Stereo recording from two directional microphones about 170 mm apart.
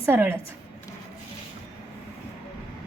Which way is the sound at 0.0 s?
15° right (ahead or behind).